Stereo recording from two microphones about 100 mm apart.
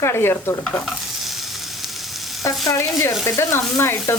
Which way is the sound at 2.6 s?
30° left (ahead or behind).